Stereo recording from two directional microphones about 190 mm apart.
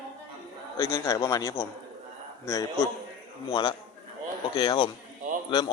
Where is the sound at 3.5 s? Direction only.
25° left (ahead or behind).